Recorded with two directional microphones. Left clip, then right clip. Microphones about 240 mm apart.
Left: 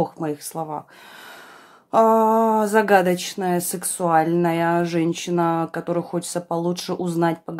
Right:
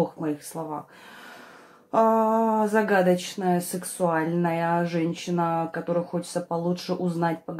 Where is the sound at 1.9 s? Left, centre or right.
Left.